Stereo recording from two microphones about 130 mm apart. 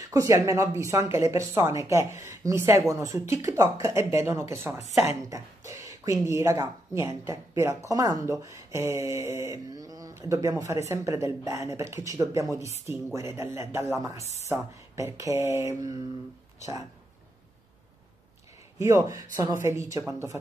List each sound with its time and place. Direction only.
0.0 s speech: 25° right (ahead or behind)
5.3 s a sound: 25° right (ahead or behind)
6.2 s speech: 25° right (ahead or behind)
18.8 s speech: 20° right (ahead or behind)